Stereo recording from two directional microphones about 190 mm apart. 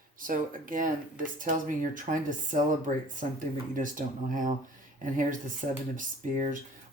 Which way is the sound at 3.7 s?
45° right (ahead or behind).